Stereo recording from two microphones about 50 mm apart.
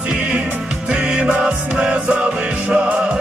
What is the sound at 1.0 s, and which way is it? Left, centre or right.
Music, right.